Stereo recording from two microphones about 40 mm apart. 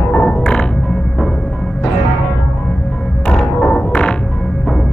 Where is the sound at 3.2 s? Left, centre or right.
Left.